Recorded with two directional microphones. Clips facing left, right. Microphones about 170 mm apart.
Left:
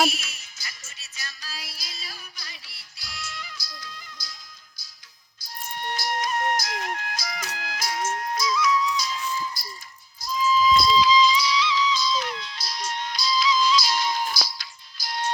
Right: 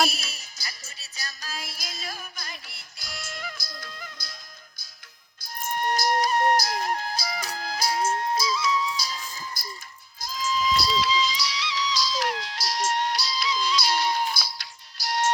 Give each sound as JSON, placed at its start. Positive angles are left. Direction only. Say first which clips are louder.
{"t": 0.1, "sound": "music", "louder": "left 1 dB", "side_deg": -35}
{"t": 5.4, "sound": "music", "louder": "right 6 dB", "side_deg": -50}
{"t": 10.3, "sound": "music", "louder": "left 5 dB", "side_deg": -75}
{"t": 14.9, "sound": "music", "louder": "right 4 dB", "side_deg": -75}